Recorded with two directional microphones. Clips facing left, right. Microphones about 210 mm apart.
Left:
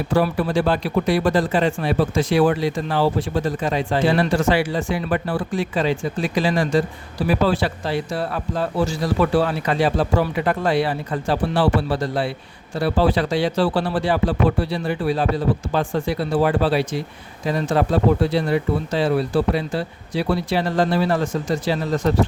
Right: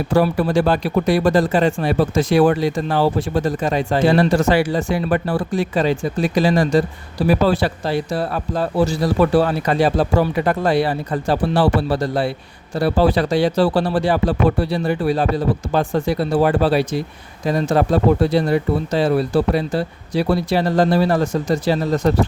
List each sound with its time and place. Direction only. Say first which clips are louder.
0.1 s speech: right 3 dB; 40° right (ahead or behind)